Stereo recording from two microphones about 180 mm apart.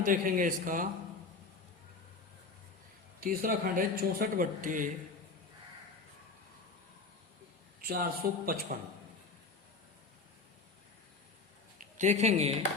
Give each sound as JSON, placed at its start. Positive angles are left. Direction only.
{"t": 0.0, "sound": "speech", "side_deg": -50}
{"t": 3.2, "sound": "speech", "side_deg": -50}
{"t": 7.8, "sound": "speech", "side_deg": -55}
{"t": 11.8, "sound": "speech", "side_deg": -40}